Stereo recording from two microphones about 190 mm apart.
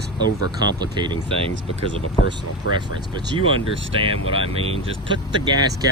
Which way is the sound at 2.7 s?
90° left.